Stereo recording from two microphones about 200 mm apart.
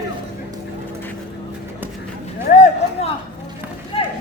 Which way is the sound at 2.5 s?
40° left (ahead or behind).